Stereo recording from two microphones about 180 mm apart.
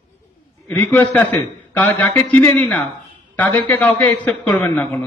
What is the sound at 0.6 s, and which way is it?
A man's voice, 10° left (ahead or behind).